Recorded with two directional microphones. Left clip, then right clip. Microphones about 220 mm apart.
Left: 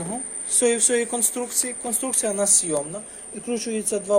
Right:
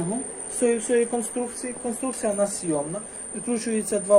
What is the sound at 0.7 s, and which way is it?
Speech, 15° left (ahead or behind).